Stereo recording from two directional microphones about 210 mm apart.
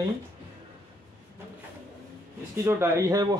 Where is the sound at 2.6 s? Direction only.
15° right (ahead or behind).